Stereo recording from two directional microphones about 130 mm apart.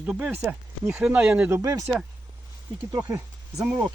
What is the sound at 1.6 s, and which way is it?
Speech, 25° right (ahead or behind).